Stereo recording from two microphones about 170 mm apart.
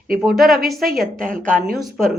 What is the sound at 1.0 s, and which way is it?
Speech, 55° right (ahead or behind).